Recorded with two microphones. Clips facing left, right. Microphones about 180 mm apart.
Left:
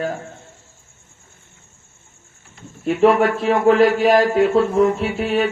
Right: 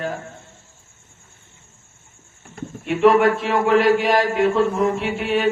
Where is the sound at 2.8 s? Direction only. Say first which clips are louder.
Even; 35° left (ahead or behind).